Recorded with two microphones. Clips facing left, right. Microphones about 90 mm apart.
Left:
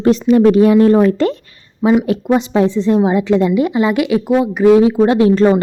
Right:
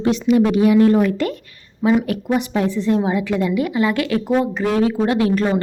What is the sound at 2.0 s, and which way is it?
A woman's voice, 25° left (ahead or behind).